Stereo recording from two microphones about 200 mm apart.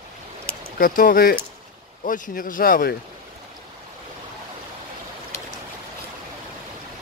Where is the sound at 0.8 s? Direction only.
45° left (ahead or behind).